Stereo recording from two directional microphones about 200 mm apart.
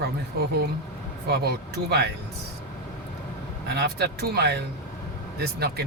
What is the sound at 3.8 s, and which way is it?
Speech, 55° right (ahead or behind).